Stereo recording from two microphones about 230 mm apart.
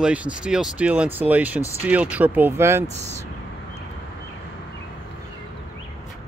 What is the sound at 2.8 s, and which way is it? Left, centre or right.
Speech, right.